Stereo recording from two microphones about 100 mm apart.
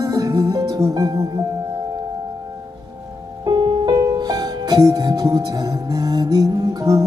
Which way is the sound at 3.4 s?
45° right (ahead or behind).